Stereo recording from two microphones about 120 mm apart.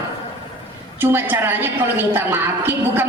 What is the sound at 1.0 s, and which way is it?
A woman's voice, 15° right (ahead or behind).